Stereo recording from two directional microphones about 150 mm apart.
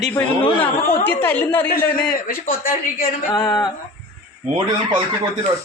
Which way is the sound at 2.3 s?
70° left (ahead or behind).